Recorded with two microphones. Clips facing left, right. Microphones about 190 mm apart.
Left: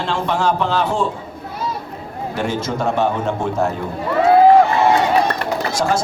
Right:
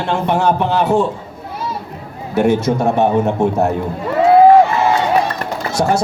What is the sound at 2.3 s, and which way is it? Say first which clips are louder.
Speech: right 9 dB; 65° right (ahead or behind).